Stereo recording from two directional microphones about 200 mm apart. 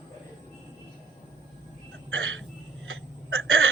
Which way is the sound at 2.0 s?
85° right.